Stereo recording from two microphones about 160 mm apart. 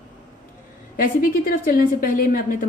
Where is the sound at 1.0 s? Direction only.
65° left (ahead or behind).